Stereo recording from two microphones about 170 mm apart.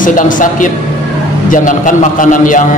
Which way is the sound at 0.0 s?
50° left (ahead or behind).